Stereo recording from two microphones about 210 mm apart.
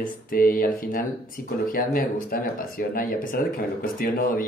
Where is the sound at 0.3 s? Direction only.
45° left (ahead or behind).